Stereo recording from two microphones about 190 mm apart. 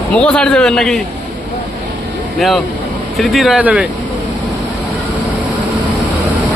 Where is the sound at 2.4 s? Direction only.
Centre (ahead or behind).